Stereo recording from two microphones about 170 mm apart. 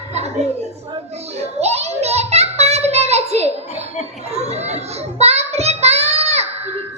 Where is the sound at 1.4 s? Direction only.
40° right (ahead or behind).